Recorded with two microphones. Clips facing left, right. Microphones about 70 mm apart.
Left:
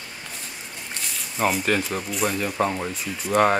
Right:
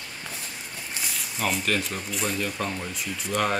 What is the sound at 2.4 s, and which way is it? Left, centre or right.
Speech, left.